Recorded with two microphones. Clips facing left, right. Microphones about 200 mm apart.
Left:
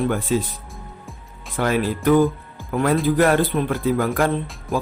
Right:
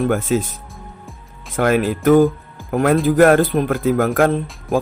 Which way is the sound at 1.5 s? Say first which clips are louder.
Right 4 dB; 50° right (ahead or behind).